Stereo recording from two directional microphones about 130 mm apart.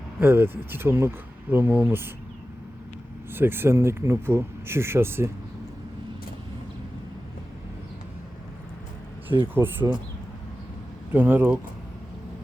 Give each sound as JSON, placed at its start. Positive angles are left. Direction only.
{"t": 0.2, "sound": "speech", "side_deg": -15}
{"t": 3.3, "sound": "speech", "side_deg": -15}
{"t": 9.6, "sound": "speech", "side_deg": -15}
{"t": 11.1, "sound": "speech", "side_deg": -15}